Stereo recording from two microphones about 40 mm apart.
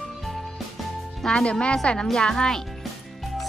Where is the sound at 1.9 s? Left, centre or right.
Left.